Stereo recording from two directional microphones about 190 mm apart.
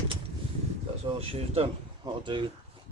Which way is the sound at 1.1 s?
30° right (ahead or behind).